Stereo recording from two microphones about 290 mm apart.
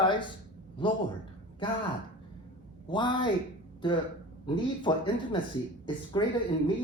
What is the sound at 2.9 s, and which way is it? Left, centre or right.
Speech, centre.